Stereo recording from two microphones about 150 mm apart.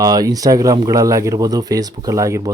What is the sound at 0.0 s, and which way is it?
Speech, 25° right (ahead or behind).